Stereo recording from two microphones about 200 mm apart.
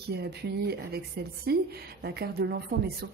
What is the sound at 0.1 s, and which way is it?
A woman's voice, 55° right (ahead or behind).